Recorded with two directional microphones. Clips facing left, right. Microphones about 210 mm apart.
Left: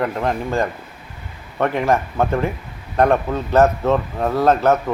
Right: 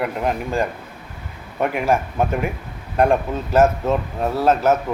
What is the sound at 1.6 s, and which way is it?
A man's voice, 10° right (ahead or behind).